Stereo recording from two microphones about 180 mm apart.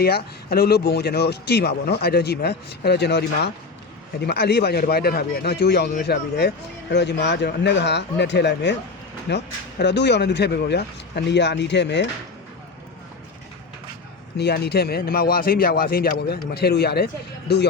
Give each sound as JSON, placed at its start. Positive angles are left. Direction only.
{"t": 0.0, "sound": "speech", "side_deg": 60}
{"t": 14.3, "sound": "speech", "side_deg": 65}